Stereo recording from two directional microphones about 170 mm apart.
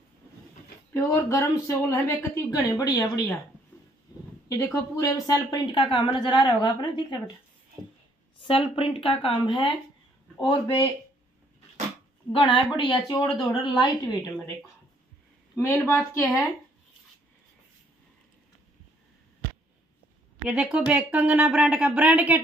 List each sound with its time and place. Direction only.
0.9 s speech: 15° left (ahead or behind)
4.5 s a woman's voice: 20° left (ahead or behind)
8.4 s a woman's voice: 30° left (ahead or behind)
12.3 s a woman's voice: 30° left (ahead or behind)
13.1 s speech: 15° left (ahead or behind)
13.7 s a woman's voice: 25° left (ahead or behind)
15.5 s speech: 15° left (ahead or behind)
20.4 s speech: 5° right (ahead or behind)